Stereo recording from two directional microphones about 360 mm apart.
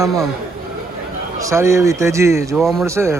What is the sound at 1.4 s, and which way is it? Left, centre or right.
Speech, centre.